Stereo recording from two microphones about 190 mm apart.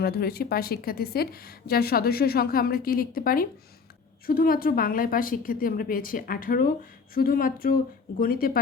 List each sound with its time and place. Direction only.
0.0 s a woman's voice: 55° left (ahead or behind)